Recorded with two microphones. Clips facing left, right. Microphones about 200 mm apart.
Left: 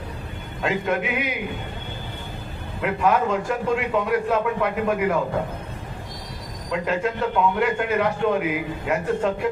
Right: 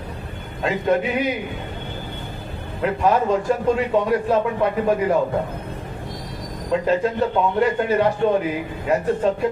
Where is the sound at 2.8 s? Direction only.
35° right (ahead or behind).